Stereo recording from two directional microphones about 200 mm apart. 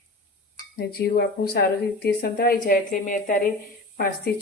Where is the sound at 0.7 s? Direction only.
50° left (ahead or behind).